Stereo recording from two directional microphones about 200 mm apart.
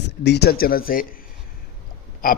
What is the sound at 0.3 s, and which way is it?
Speech, 55° left (ahead or behind).